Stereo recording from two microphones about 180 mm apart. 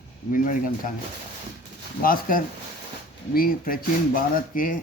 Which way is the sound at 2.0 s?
50° left (ahead or behind).